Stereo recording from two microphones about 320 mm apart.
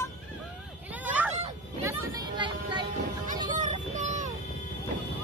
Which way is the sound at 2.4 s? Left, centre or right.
Centre.